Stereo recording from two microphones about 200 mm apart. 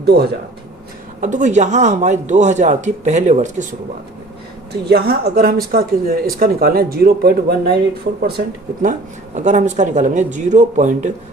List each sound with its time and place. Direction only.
0.0 s speech: 55° right (ahead or behind)
1.2 s speech: 40° right (ahead or behind)
4.7 s speech: 55° right (ahead or behind)
8.8 s speech: 40° right (ahead or behind)